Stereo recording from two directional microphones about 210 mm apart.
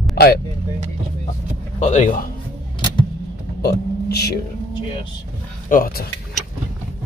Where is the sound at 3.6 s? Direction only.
50° left (ahead or behind).